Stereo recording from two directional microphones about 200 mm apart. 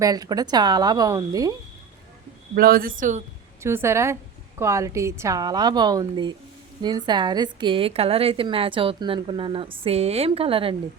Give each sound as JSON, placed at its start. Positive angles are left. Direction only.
{"t": 0.0, "sound": "a woman's voice", "side_deg": -20}
{"t": 2.6, "sound": "speech", "side_deg": -45}
{"t": 3.6, "sound": "a woman's voice", "side_deg": -10}